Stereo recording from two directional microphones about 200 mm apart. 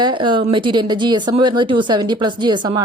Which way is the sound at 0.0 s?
25° right (ahead or behind).